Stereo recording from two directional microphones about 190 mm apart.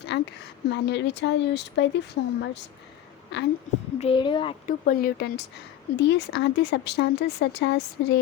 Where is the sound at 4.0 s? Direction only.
25° left (ahead or behind).